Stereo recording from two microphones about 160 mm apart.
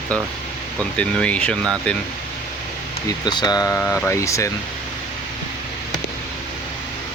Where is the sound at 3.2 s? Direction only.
25° left (ahead or behind).